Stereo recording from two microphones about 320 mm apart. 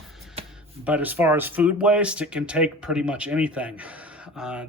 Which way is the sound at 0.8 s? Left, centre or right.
Centre.